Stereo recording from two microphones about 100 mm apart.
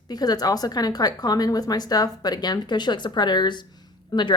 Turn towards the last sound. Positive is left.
turn(degrees=50)  # may be behind; listen again after turning